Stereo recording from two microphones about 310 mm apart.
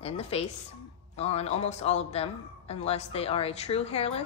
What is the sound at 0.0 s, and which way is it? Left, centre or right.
A woman's voice, centre.